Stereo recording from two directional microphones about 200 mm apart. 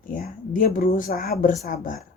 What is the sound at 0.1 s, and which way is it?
A woman's voice, 45° left (ahead or behind).